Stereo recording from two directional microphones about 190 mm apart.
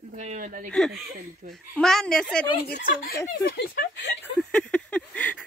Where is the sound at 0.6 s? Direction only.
5° left (ahead or behind).